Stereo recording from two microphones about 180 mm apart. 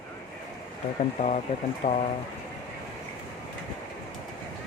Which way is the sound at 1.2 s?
40° left (ahead or behind).